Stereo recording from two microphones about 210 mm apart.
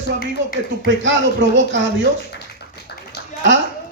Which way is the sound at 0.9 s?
60° right (ahead or behind).